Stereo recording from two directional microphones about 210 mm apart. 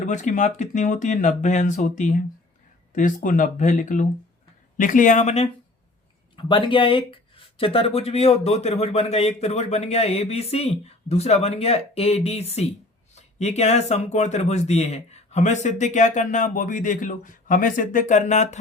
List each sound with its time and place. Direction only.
0.0 s speech: 35° left (ahead or behind)